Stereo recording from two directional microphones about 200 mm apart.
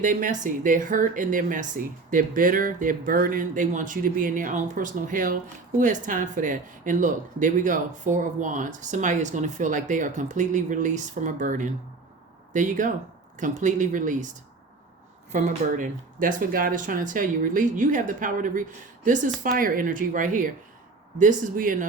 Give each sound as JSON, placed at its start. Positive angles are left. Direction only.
{"t": 0.0, "sound": "speech", "side_deg": -40}
{"t": 15.3, "sound": "speech", "side_deg": -40}